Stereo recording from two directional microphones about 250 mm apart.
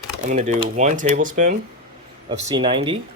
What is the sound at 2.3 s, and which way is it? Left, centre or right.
Speech, centre.